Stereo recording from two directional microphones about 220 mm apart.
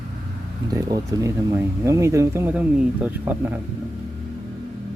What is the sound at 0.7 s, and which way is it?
Speech, 15° right (ahead or behind).